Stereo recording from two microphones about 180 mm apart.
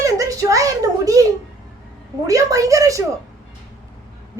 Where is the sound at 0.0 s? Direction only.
20° right (ahead or behind).